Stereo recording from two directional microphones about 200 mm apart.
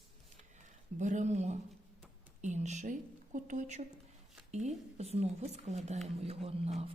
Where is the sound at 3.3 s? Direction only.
40° right (ahead or behind).